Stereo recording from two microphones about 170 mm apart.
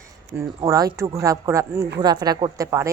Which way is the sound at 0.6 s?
20° right (ahead or behind).